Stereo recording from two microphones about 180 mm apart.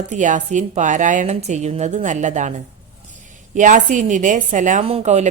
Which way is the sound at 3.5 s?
45° right (ahead or behind).